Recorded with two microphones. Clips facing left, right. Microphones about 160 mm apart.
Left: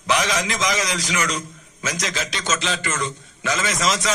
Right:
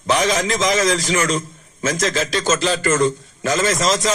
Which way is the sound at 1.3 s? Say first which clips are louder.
Right 6 dB; 30° right (ahead or behind).